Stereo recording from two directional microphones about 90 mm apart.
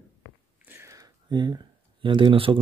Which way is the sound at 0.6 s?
30° right (ahead or behind).